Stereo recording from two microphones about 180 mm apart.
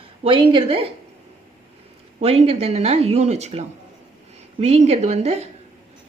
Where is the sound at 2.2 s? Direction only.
35° right (ahead or behind).